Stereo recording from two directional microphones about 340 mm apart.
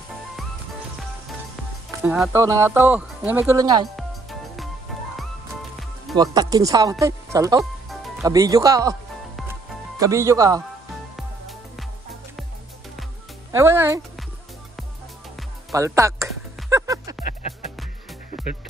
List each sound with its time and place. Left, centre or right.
2.0 s speech: centre
3.9 s music: centre
6.1 s speech: centre
7.9 s music: centre
8.3 s speech: centre
9.9 s speech: centre
13.5 s speech: centre
15.7 s music: centre
17.2 s music: left
18.3 s music: centre